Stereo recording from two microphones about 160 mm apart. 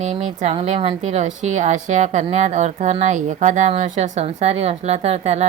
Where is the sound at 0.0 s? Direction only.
45° right (ahead or behind).